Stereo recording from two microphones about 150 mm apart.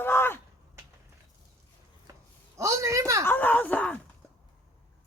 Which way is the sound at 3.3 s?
10° left (ahead or behind).